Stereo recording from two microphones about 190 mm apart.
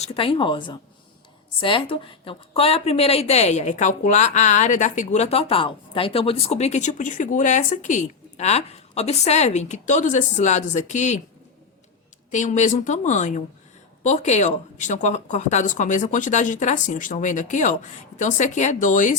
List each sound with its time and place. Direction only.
0.0 s a woman's voice: 30° left (ahead or behind)
12.3 s a woman's voice: 40° left (ahead or behind)